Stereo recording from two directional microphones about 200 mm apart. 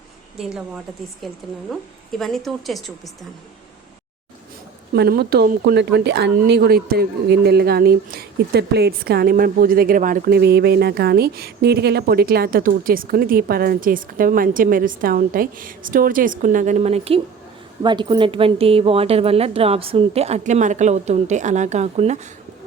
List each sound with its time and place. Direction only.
1.2 s a woman's voice: centre (ahead or behind)
4.9 s speech: 50° right (ahead or behind); by 22.3 s 35° right (ahead or behind)